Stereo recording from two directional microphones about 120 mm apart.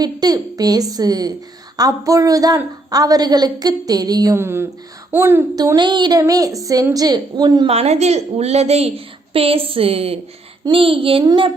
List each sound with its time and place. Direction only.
0.0 s a woman's voice: 35° right (ahead or behind)
4.4 s speech: 20° right (ahead or behind)
5.5 s a woman's voice: 35° right (ahead or behind)
7.7 s a woman's voice: 60° right (ahead or behind)